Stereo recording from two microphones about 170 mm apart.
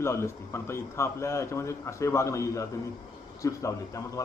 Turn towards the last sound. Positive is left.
turn(degrees=20)  # may be behind; listen again after turning